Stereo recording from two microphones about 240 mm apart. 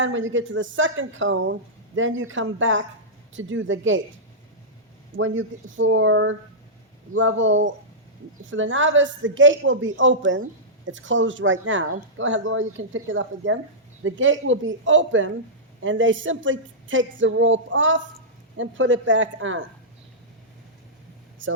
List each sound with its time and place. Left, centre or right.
0.0 s speech: right
5.1 s speech: right